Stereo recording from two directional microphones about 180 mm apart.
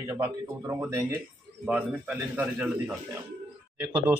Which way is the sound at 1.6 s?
5° right (ahead or behind).